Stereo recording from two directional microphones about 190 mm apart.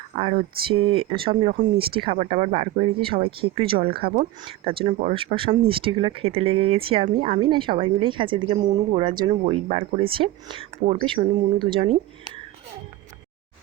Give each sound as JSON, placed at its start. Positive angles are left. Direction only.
{"t": 0.2, "sound": "speech", "side_deg": -30}